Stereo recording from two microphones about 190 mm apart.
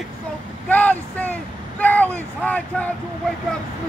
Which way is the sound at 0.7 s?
10° left (ahead or behind).